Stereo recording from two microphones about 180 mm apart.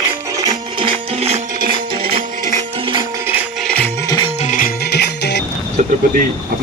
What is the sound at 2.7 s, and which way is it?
Music, 30° right (ahead or behind).